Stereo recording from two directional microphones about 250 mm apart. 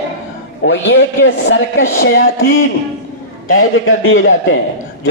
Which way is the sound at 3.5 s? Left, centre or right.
Left.